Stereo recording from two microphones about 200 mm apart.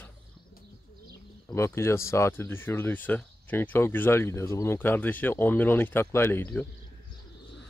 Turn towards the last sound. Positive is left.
turn(degrees=10)  # may be behind; listen again after turning